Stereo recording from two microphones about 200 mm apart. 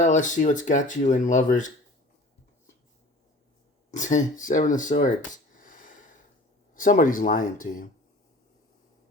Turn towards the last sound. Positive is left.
turn(degrees=40)  # may be behind; listen again after turning